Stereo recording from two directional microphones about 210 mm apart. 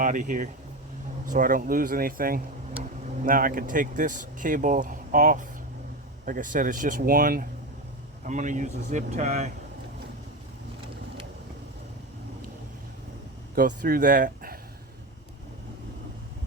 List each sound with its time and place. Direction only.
0.0 s speech: 40° right (ahead or behind)
13.6 s speech: 40° right (ahead or behind)